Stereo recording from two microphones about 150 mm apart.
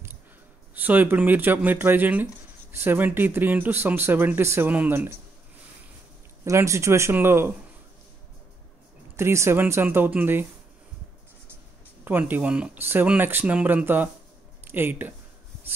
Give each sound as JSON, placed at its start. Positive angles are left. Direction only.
{"t": 0.7, "sound": "speech", "side_deg": -10}
{"t": 6.4, "sound": "speech", "side_deg": -20}
{"t": 9.1, "sound": "speech", "side_deg": -20}
{"t": 12.0, "sound": "speech", "side_deg": -10}